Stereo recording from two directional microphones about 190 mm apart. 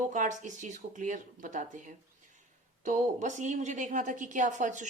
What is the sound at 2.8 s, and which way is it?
Speech, 40° right (ahead or behind).